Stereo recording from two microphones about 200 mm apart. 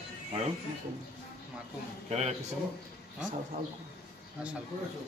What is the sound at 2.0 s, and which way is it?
Speech, 35° right (ahead or behind).